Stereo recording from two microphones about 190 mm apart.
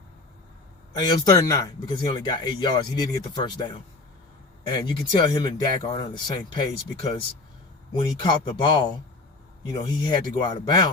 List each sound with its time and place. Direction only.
0.9 s speech: 20° left (ahead or behind)
7.9 s speech: 25° left (ahead or behind)